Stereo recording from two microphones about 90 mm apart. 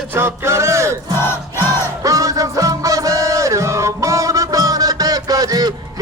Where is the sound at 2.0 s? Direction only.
40° right (ahead or behind).